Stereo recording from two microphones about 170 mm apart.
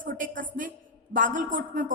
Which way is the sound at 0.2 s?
50° right (ahead or behind).